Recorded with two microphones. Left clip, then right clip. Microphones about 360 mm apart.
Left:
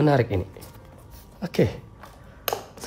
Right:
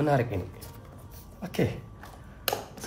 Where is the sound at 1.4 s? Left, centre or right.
Left.